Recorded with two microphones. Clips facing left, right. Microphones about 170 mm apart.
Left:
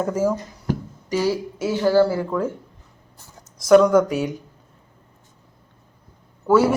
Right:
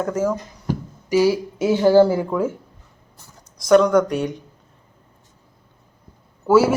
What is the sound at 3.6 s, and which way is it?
Speech, centre (ahead or behind).